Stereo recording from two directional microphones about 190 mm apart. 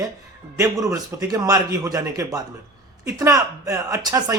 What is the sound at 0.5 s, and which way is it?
A man's voice, 15° right (ahead or behind).